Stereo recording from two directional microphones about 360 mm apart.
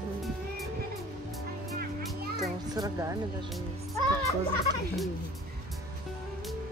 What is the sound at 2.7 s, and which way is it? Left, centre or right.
Speech, centre.